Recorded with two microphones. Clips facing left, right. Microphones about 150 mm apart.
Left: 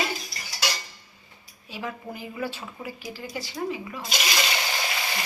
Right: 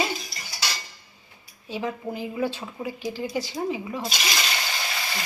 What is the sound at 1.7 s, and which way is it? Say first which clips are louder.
A woman's voice: right 5 dB; 25° right (ahead or behind).